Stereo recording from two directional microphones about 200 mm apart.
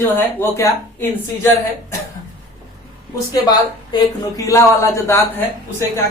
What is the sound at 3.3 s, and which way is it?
A man's voice, 20° left (ahead or behind).